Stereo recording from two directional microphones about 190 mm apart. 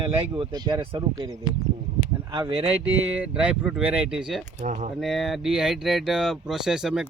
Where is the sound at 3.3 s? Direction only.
5° right (ahead or behind).